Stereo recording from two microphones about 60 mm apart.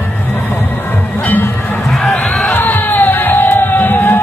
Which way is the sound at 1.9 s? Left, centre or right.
Centre.